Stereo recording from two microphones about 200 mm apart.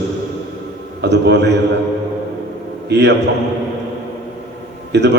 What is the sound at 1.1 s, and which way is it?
Speech, 60° right (ahead or behind).